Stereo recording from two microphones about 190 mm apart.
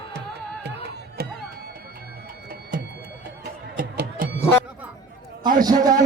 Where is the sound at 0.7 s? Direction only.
60° right (ahead or behind).